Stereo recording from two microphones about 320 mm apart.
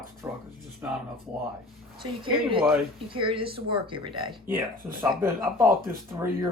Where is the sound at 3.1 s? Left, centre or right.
Centre.